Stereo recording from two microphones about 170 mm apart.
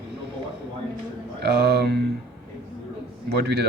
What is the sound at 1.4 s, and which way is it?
Speech, 70° right (ahead or behind).